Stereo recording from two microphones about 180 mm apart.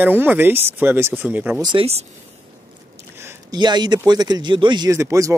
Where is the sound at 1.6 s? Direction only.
30° right (ahead or behind).